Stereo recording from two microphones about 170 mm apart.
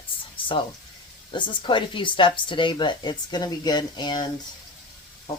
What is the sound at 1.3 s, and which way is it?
Speech, 30° left (ahead or behind).